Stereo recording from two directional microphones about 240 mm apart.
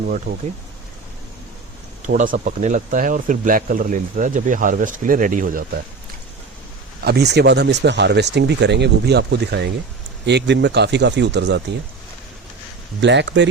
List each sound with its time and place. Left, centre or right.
0.3 s speech: right
2.0 s speech: right
7.0 s speech: right
13.0 s speech: right